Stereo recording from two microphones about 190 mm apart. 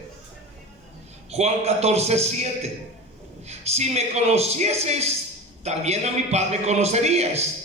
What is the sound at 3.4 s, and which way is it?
A man's voice, 35° right (ahead or behind).